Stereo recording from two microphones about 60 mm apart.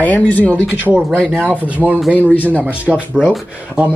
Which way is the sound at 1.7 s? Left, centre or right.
Right.